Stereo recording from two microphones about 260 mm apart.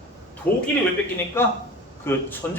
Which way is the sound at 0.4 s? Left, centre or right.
Left.